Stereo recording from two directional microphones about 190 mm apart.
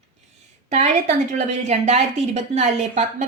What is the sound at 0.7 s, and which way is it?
Speech, 35° right (ahead or behind).